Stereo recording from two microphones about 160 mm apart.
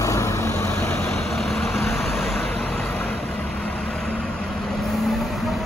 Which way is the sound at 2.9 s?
10° left (ahead or behind).